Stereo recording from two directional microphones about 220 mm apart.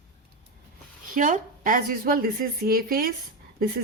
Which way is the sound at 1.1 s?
35° right (ahead or behind).